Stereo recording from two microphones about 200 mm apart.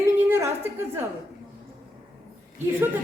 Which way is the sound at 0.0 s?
15° right (ahead or behind).